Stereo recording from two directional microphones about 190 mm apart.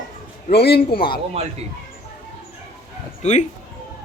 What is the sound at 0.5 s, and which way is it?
Speech, 60° left (ahead or behind).